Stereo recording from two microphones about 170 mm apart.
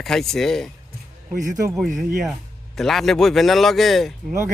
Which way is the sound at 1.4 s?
20° right (ahead or behind).